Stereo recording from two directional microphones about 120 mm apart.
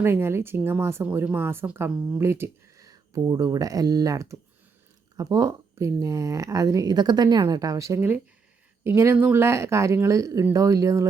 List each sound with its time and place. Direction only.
0.0 s speech: 20° right (ahead or behind)